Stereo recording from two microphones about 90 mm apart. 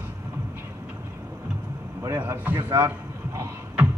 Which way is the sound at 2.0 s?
25° right (ahead or behind).